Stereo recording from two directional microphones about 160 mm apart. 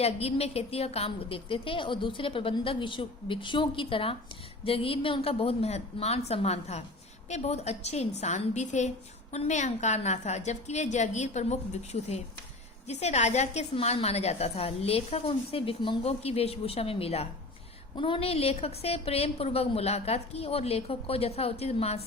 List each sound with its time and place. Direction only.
0.0 s a woman's voice: 40° left (ahead or behind)